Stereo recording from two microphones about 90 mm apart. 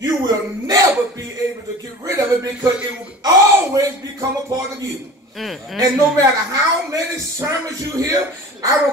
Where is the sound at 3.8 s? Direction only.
40° right (ahead or behind).